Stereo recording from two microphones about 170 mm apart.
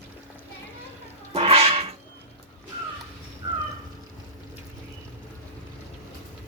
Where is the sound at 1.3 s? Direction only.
35° right (ahead or behind).